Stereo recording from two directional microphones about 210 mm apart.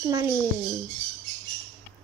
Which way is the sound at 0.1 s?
15° right (ahead or behind).